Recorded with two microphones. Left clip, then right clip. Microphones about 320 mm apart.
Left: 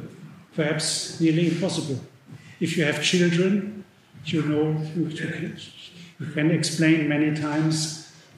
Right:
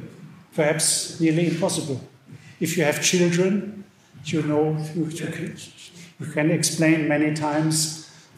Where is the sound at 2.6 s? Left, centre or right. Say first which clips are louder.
Right 2 dB; centre.